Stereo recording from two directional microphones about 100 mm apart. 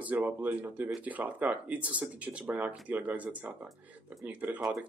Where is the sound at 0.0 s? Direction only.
15° right (ahead or behind).